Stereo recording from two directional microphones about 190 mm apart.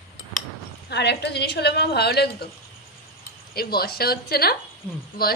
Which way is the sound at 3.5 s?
55° left (ahead or behind).